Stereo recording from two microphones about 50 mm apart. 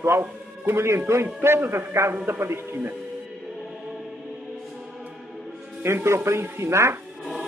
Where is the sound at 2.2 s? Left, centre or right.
Right.